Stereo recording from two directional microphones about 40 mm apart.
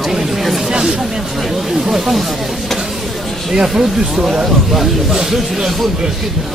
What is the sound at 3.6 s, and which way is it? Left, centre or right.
Speech, centre.